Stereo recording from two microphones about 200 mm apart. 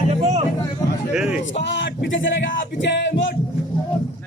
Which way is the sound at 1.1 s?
5° right (ahead or behind).